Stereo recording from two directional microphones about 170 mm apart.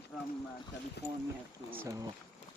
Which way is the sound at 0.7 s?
90° left.